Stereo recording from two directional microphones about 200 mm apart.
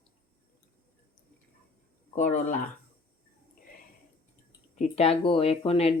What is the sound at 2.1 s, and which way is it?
Speech, 35° left (ahead or behind).